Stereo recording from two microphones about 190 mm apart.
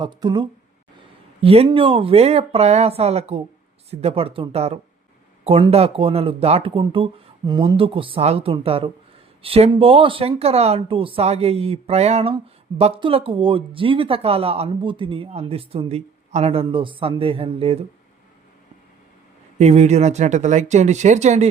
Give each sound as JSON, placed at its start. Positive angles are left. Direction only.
{"t": 0.0, "sound": "speech", "side_deg": -25}
{"t": 19.5, "sound": "speech", "side_deg": -35}